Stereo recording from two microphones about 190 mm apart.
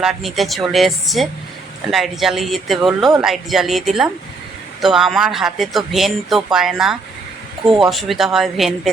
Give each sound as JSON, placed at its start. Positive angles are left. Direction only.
{"t": 0.0, "sound": "speech", "side_deg": 0}